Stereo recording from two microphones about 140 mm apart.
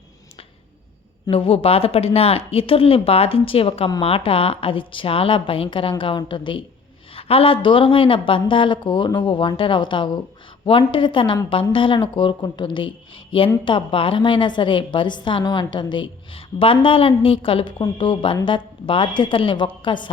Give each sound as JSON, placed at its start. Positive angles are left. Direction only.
{"t": 1.3, "sound": "a woman's voice", "side_deg": 45}